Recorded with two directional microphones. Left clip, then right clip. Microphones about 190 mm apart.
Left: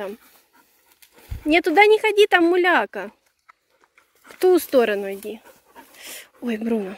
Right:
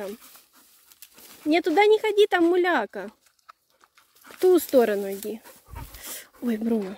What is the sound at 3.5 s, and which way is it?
Pig, 25° right (ahead or behind).